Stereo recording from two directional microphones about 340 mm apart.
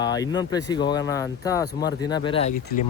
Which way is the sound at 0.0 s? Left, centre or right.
Centre.